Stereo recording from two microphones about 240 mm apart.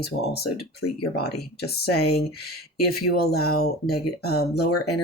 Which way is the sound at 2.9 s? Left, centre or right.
Left.